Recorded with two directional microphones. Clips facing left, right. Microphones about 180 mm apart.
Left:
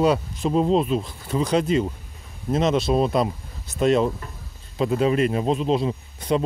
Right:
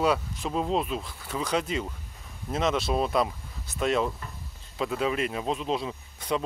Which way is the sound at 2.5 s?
35° left (ahead or behind).